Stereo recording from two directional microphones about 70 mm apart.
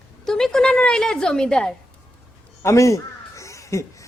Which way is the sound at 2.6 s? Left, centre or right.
Left.